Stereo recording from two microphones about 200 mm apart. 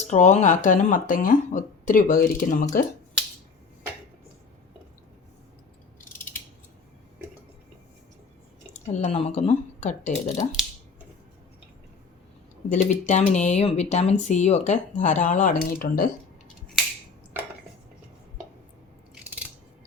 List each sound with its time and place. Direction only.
0.1 s speech: 35° left (ahead or behind)
8.9 s speech: 35° left (ahead or behind)
12.7 s speech: 35° left (ahead or behind)